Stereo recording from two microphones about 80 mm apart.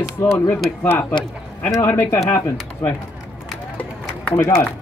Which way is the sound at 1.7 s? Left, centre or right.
Left.